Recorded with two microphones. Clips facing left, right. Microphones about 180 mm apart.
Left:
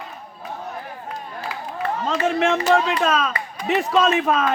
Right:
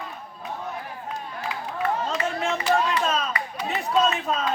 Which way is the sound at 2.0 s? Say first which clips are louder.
Left 6 dB; 90° left.